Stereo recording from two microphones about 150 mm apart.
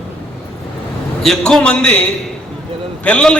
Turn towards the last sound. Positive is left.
turn(degrees=5)  # may be behind; listen again after turning